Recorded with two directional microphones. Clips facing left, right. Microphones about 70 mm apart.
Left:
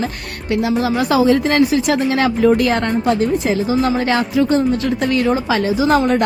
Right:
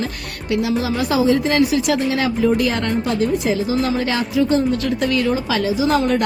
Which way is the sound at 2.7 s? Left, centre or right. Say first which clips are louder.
Left 3 dB; left.